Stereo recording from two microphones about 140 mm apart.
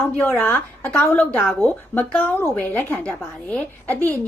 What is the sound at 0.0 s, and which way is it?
A woman's voice, 15° left (ahead or behind).